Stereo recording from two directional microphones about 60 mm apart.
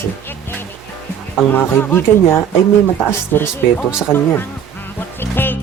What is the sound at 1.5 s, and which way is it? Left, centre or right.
Speech, left.